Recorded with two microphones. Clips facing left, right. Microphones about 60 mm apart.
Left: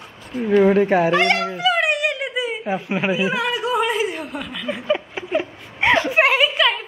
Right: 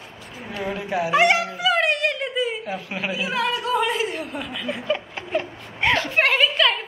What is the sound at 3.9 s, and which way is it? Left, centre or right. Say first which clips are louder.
Chuckle: left 3 dB; centre.